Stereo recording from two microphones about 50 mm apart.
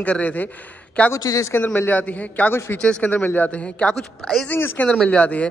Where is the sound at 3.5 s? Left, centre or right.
Left.